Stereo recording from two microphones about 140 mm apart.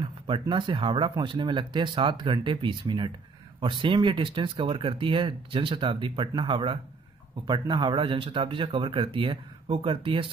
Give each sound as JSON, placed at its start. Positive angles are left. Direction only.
{"t": 0.0, "sound": "speech", "side_deg": -35}